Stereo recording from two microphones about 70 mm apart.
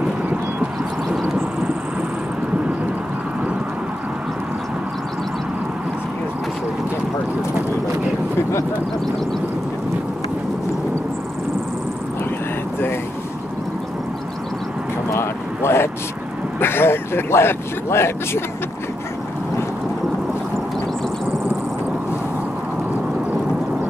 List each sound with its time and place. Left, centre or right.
15.1 s vehicle: left